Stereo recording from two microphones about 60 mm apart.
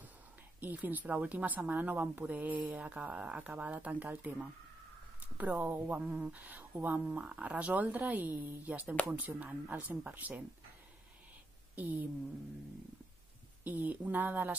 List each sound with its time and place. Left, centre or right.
0.6 s speech: right
11.7 s speech: right
13.7 s speech: right